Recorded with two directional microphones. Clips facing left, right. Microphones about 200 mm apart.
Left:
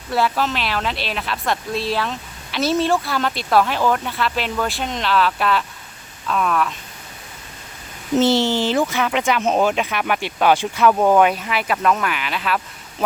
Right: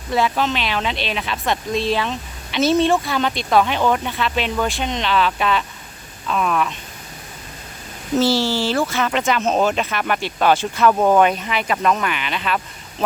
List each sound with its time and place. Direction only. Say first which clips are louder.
0.1 s speech: right 1 dB; 5° left (ahead or behind)
8.1 s speech: left 1 dB; 20° left (ahead or behind); by 12.6 s 5° left (ahead or behind)